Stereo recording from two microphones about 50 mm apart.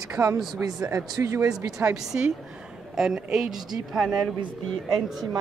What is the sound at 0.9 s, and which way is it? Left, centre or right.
Speech, right.